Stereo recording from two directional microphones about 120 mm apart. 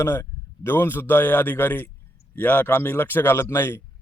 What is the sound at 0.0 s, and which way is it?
A man's voice, 20° left (ahead or behind).